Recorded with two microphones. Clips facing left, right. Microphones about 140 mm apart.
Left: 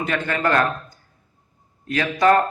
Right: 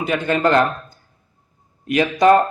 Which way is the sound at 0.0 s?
15° right (ahead or behind).